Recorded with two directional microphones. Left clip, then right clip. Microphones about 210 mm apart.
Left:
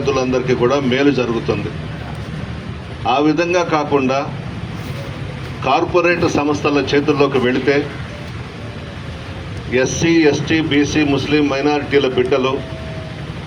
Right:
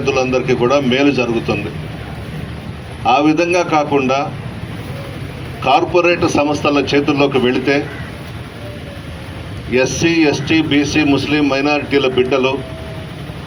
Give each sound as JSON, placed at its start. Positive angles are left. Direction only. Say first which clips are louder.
{"t": 0.0, "sound": "speech", "louder": "right 2 dB", "side_deg": -30}
{"t": 3.0, "sound": "speech", "louder": "right 3 dB", "side_deg": -30}
{"t": 5.6, "sound": "speech", "louder": "right 2 dB", "side_deg": -30}
{"t": 9.7, "sound": "speech", "louder": "right 1 dB", "side_deg": -30}